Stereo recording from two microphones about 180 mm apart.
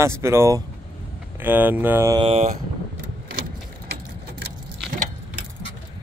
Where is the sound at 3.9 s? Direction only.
65° right (ahead or behind).